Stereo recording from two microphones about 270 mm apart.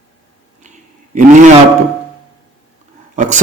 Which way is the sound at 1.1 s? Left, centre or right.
Right.